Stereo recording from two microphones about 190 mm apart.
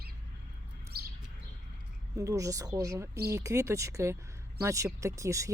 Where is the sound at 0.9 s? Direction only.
55° right (ahead or behind).